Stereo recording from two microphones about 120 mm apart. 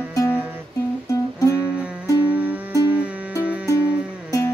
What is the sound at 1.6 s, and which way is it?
Music, 10° right (ahead or behind).